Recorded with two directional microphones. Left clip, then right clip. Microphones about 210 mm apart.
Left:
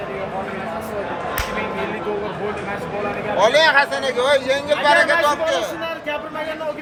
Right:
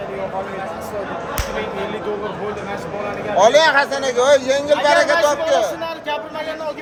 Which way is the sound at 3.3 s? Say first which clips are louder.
Right 2 dB; 55° right (ahead or behind).